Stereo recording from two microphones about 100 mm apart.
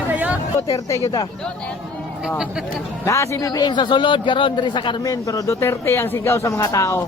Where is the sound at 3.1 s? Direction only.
30° left (ahead or behind); by 4.9 s 50° left (ahead or behind).